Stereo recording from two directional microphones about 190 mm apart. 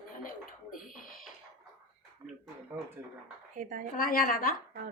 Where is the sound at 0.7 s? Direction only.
45° left (ahead or behind).